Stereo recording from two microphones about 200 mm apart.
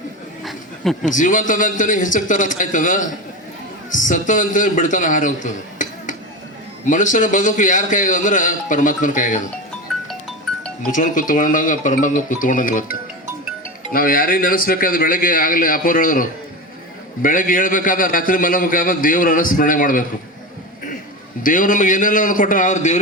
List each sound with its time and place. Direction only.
1.0 s a man's voice: 40° left (ahead or behind)
10.1 s music: centre (ahead or behind)
10.9 s a man's voice: 40° left (ahead or behind)
21.4 s a man's voice: 40° left (ahead or behind)